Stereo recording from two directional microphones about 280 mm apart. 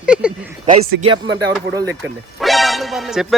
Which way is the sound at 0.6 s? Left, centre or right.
Centre.